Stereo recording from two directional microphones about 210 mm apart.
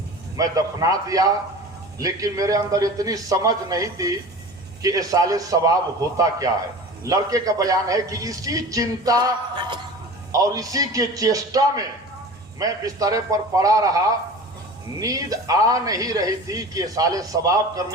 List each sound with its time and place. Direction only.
0.3 s a man's voice: 15° right (ahead or behind)
7.1 s a man's voice: 15° right (ahead or behind)